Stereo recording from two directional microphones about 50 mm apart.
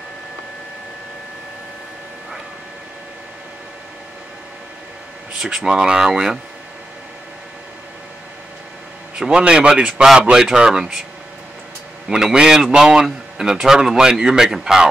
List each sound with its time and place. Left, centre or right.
5.4 s a man's voice: centre
9.2 s a man's voice: centre
12.1 s a man's voice: centre